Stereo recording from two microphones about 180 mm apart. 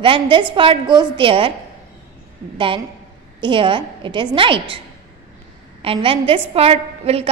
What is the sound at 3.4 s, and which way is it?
A woman's voice, 25° right (ahead or behind).